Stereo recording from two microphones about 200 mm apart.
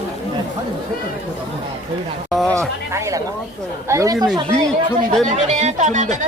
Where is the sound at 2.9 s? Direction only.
15° right (ahead or behind).